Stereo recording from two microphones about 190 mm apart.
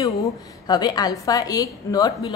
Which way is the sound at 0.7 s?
20° left (ahead or behind).